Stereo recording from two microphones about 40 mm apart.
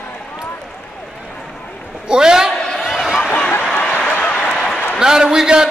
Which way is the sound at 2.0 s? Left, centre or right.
Centre.